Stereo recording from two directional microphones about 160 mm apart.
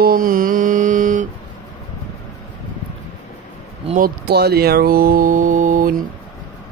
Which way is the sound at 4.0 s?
90° right.